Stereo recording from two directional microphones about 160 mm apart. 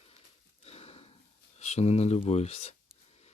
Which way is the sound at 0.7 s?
40° left (ahead or behind).